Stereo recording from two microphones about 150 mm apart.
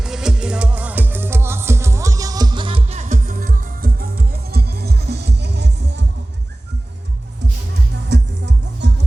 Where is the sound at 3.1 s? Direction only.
65° right (ahead or behind).